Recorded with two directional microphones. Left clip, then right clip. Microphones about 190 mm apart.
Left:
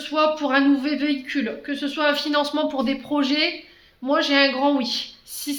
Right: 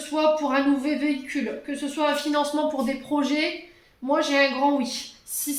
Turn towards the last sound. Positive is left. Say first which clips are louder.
# left 2 dB
turn(degrees=35)  # may be behind; listen again after turning